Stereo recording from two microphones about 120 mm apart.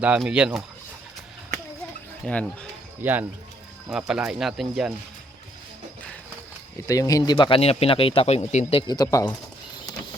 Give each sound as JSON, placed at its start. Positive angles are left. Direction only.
{"t": 0.2, "sound": "speech", "side_deg": -5}
{"t": 2.2, "sound": "speech", "side_deg": 10}
{"t": 3.0, "sound": "speech", "side_deg": -15}
{"t": 4.1, "sound": "speech", "side_deg": -5}
{"t": 6.8, "sound": "speech", "side_deg": 30}
{"t": 7.6, "sound": "speech", "side_deg": 55}
{"t": 8.9, "sound": "speech", "side_deg": 30}